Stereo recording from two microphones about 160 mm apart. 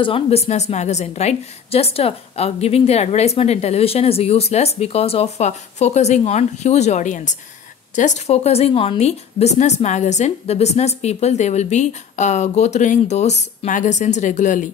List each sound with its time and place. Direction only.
0.0 s a woman's voice: 35° left (ahead or behind)